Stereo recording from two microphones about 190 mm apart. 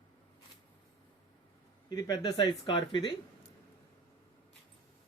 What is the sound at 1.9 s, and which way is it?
Speech, 20° left (ahead or behind).